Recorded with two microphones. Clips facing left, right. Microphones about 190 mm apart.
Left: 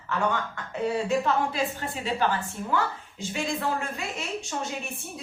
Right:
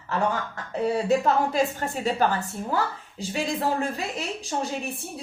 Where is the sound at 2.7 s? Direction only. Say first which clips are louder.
Even; 35° right (ahead or behind).